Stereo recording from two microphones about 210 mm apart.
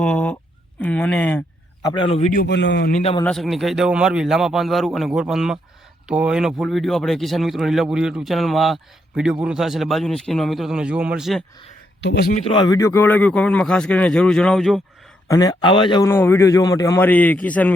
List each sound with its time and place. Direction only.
0.0 s a sound: 5° left (ahead or behind)
0.8 s a man's voice: 5° left (ahead or behind); by 2.4 s 30° left (ahead or behind)
2.4 s a man's voice: 55° left (ahead or behind)
3.0 s a man's voice: 30° left (ahead or behind)
3.2 s speech: centre (ahead or behind)
12.0 s a man's voice: 50° left (ahead or behind)
12.5 s speech: 20° left (ahead or behind); by 14.8 s centre (ahead or behind)
15.3 s a man's voice: 15° left (ahead or behind)